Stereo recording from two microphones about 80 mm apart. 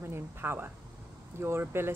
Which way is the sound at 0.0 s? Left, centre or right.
Right.